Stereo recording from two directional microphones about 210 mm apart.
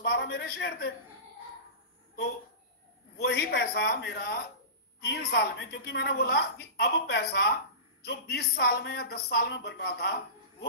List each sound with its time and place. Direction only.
0.0 s speech: 50° left (ahead or behind)
3.2 s speech: 50° left (ahead or behind)